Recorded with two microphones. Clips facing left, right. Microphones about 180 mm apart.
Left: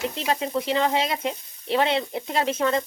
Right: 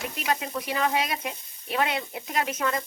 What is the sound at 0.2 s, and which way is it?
A woman's voice, 30° left (ahead or behind).